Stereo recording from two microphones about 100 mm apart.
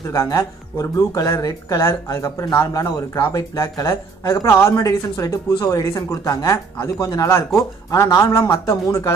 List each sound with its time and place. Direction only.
0.1 s speech: 30° left (ahead or behind)